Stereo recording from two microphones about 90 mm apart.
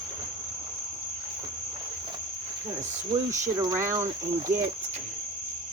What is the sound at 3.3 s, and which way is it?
Speech, 40° right (ahead or behind).